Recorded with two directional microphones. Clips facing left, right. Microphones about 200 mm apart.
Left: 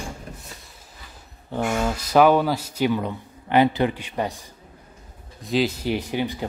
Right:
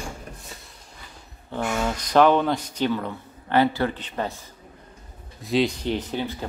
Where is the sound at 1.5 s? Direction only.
10° left (ahead or behind).